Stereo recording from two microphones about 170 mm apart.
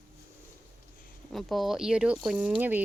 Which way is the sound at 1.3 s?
Centre (ahead or behind).